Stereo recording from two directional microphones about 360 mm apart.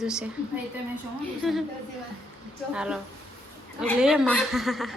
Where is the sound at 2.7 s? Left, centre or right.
Centre.